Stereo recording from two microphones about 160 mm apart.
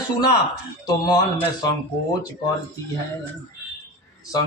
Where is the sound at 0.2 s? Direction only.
20° left (ahead or behind).